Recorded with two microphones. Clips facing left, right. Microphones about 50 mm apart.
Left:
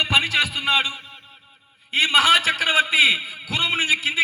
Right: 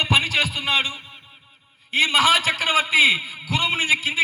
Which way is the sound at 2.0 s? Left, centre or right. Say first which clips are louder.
Left 2 dB; centre.